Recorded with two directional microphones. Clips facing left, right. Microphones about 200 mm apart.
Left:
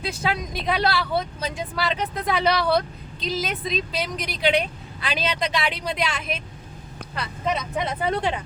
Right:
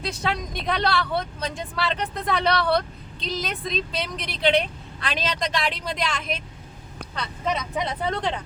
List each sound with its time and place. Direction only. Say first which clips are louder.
0.0 s speech: left 1 dB; 5° left (ahead or behind)